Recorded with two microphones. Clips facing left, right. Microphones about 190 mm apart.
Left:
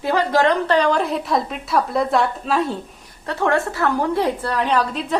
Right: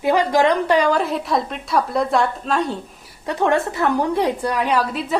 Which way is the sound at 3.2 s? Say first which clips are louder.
Right 1 dB; 15° right (ahead or behind).